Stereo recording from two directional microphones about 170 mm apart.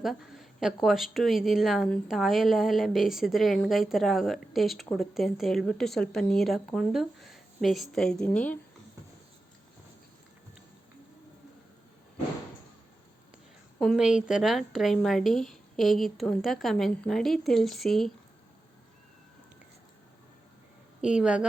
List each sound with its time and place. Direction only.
0.0 s a woman's voice: centre (ahead or behind)
13.7 s a woman's voice: centre (ahead or behind)
21.0 s a woman's voice: 5° right (ahead or behind)